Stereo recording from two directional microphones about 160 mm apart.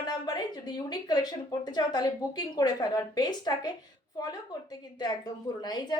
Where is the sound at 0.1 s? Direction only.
25° left (ahead or behind).